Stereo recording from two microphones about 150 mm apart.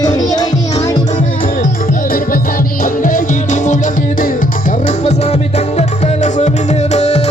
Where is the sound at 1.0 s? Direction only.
55° left (ahead or behind).